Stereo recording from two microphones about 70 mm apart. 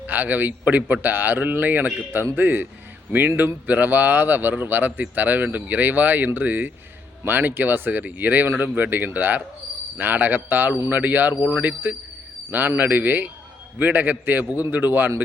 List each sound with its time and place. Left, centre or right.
0.1 s a man's voice: right